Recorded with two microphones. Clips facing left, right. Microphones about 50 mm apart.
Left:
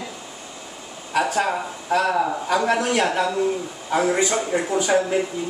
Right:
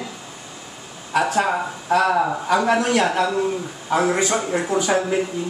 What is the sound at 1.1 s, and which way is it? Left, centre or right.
Speech, centre.